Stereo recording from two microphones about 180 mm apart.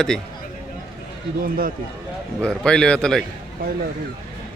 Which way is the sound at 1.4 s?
55° right (ahead or behind).